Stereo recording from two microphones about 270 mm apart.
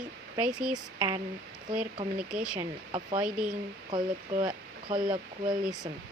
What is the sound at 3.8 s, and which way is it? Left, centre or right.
Speech, right.